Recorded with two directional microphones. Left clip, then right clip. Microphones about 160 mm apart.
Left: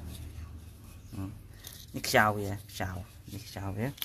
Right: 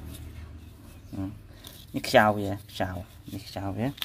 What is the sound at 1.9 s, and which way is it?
Speech, 35° right (ahead or behind).